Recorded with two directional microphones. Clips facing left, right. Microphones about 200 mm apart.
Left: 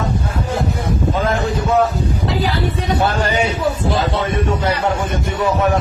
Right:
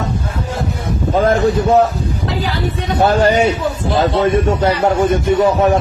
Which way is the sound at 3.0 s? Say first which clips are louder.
Right 8 dB; 45° right (ahead or behind).